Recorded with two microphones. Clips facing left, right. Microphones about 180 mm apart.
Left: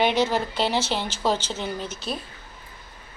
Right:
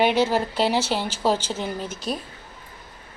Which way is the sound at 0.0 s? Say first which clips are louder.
Right 2 dB; 10° right (ahead or behind).